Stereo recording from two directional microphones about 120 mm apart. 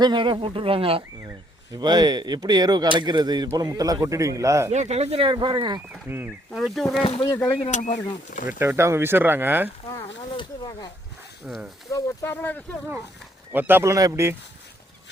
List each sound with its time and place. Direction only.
0.0 s speech: 40° right (ahead or behind)
1.7 s a man's voice: 35° right (ahead or behind)
4.7 s speech: 70° right (ahead or behind); by 5.8 s 40° right (ahead or behind)
6.1 s a man's voice: 20° right (ahead or behind)
6.5 s speech: centre (ahead or behind)
7.7 s speech: 80° left
8.4 s speech: 20° right (ahead or behind)
10.3 s snake: 35° left (ahead or behind)
11.4 s speech: 10° right (ahead or behind)
11.9 s speech: 25° left (ahead or behind)
13.5 s a man's voice: 15° right (ahead or behind)